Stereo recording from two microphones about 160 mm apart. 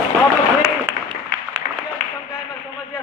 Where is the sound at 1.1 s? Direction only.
30° right (ahead or behind).